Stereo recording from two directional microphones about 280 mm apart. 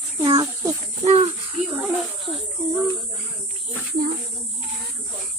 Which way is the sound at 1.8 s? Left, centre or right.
Centre.